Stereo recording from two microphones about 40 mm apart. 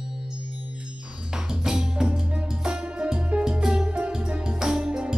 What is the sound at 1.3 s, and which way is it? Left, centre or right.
Music, centre.